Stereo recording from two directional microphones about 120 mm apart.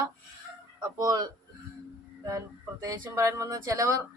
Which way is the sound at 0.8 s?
30° right (ahead or behind).